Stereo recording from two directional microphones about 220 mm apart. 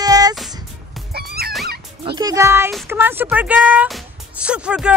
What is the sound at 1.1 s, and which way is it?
Music, 45° right (ahead or behind).